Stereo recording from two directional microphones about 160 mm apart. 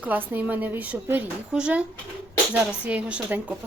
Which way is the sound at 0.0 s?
10° right (ahead or behind).